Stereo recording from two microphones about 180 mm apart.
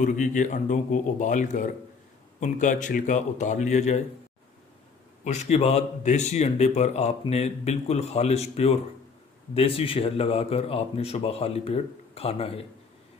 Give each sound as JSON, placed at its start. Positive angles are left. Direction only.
{"t": 0.0, "sound": "speech", "side_deg": 45}
{"t": 5.2, "sound": "speech", "side_deg": 40}